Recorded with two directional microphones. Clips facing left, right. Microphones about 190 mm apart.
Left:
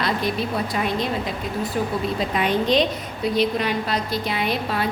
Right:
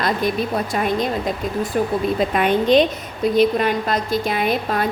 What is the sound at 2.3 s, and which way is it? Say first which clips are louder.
A woman's voice: right 4 dB; 55° right (ahead or behind).